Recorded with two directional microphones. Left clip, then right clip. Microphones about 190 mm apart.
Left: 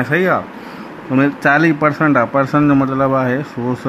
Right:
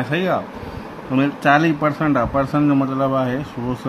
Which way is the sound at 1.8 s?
15° left (ahead or behind).